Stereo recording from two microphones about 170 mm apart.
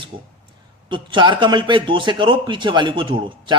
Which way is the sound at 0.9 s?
25° right (ahead or behind).